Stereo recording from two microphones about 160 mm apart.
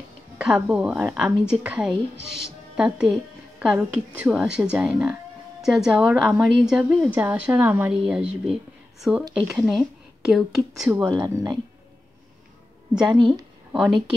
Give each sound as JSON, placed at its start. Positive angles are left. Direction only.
{"t": 0.4, "sound": "a woman's voice", "side_deg": -5}
{"t": 11.1, "sound": "speech", "side_deg": -20}
{"t": 13.0, "sound": "speech", "side_deg": -25}